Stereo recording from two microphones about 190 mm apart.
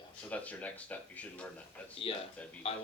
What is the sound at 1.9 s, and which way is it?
Speech, 30° left (ahead or behind).